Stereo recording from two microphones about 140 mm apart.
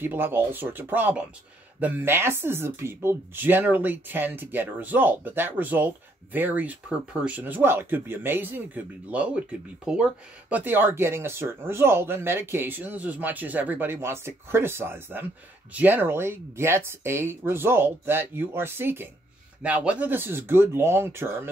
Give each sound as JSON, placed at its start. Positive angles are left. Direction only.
{"t": 0.0, "sound": "speech", "side_deg": -15}